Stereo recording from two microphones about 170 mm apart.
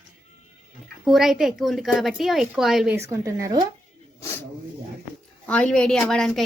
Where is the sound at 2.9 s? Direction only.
15° right (ahead or behind).